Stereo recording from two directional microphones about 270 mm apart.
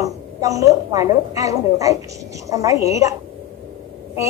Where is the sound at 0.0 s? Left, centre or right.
Centre.